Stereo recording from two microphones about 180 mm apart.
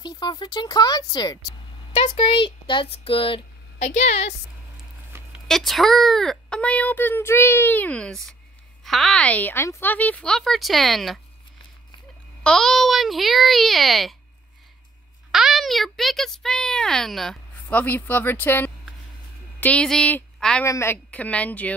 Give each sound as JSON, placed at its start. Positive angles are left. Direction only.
{"t": 0.0, "sound": "speech", "side_deg": 25}
{"t": 2.0, "sound": "speech", "side_deg": 35}
{"t": 5.7, "sound": "a child's voice", "side_deg": 0}
{"t": 12.4, "sound": "a woman's voice", "side_deg": 0}
{"t": 15.3, "sound": "a child's voice", "side_deg": 0}
{"t": 20.6, "sound": "a child's voice", "side_deg": 15}